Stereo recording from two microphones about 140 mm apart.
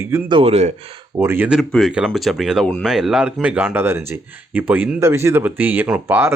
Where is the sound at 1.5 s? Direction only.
Centre (ahead or behind).